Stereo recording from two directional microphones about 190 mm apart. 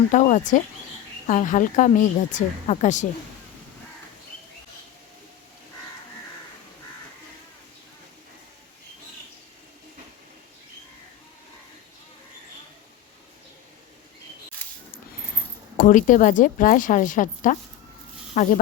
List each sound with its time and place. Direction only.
0.1 s speech: 40° left (ahead or behind)
15.8 s a woman's voice: 45° left (ahead or behind)